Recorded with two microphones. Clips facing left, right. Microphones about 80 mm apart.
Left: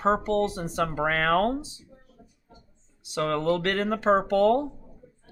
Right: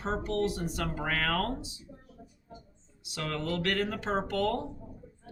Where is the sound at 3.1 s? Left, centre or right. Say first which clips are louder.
Left 9 dB; left.